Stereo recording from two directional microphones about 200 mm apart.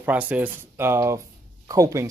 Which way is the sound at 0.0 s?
10° right (ahead or behind).